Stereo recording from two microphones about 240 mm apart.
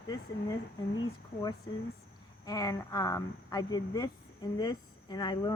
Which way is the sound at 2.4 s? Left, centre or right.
Centre.